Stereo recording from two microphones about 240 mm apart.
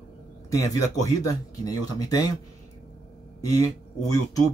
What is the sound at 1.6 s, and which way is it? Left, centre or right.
Speech, centre.